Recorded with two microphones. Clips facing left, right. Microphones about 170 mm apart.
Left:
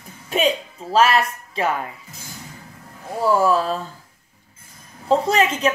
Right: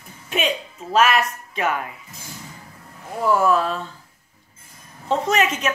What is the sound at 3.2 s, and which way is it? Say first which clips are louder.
Speech: left 1 dB; 30° left (ahead or behind).